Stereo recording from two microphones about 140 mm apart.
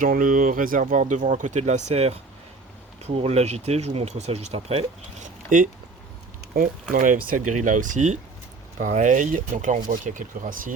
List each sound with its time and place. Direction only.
0.0 s speech: 75° right (ahead or behind); by 4.9 s 45° right (ahead or behind)
5.2 s a sound: 65° right (ahead or behind)
6.9 s speech: 70° right (ahead or behind)